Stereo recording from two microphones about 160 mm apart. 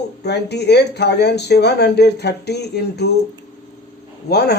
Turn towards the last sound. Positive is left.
turn(degrees=90)